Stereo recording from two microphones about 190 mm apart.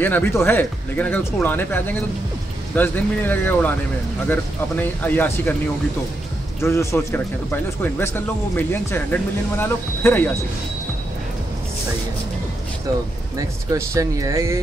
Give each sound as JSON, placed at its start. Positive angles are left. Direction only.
{"t": 0.0, "sound": "speech", "side_deg": 10}
{"t": 6.6, "sound": "speech", "side_deg": 15}
{"t": 13.4, "sound": "speech", "side_deg": -15}